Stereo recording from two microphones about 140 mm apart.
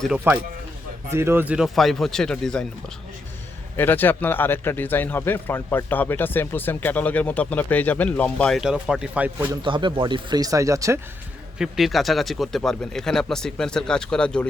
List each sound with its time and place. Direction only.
0.3 s speech: 15° right (ahead or behind); by 2.6 s 5° left (ahead or behind)
3.8 s a man's voice: 15° left (ahead or behind); by 9.5 s 10° right (ahead or behind)
9.6 s speech: 35° right (ahead or behind)
11.5 s speech: centre (ahead or behind)